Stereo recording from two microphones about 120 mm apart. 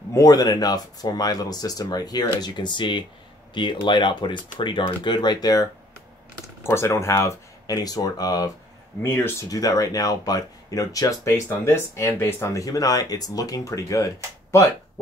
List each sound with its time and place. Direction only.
0.1 s speech: 30° left (ahead or behind)
6.6 s speech: 20° left (ahead or behind)
9.0 s speech: 20° left (ahead or behind)
9.5 s speech: 30° left (ahead or behind)